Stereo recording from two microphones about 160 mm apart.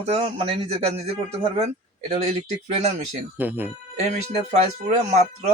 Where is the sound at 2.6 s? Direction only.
40° right (ahead or behind).